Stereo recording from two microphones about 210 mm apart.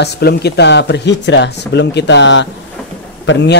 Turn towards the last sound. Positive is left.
turn(degrees=60)  # may be behind; listen again after turning